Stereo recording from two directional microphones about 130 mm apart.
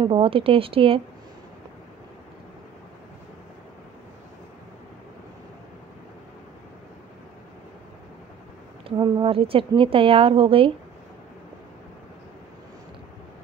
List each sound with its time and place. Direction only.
0.0 s a woman's voice: 40° right (ahead or behind)
8.8 s speech: 35° right (ahead or behind)
9.2 s a woman's voice: 45° right (ahead or behind)